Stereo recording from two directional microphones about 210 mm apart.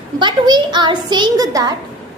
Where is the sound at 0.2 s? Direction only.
20° right (ahead or behind).